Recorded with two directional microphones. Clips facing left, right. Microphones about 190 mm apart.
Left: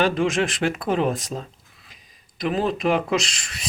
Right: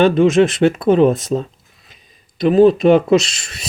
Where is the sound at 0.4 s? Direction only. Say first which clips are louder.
Right 10 dB; 25° right (ahead or behind).